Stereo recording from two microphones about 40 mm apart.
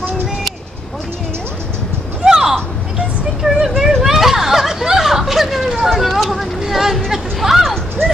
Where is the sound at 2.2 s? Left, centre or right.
Centre.